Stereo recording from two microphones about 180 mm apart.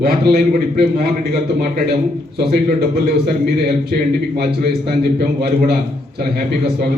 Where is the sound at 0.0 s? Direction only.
60° right (ahead or behind).